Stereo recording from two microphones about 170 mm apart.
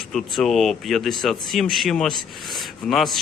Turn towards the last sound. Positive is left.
turn(degrees=0)  # may be behind; listen again after turning